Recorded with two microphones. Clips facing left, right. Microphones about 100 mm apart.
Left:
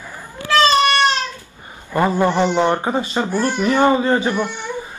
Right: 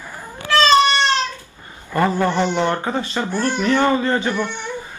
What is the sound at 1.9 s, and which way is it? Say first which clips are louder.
Speech: left 2 dB; 15° left (ahead or behind).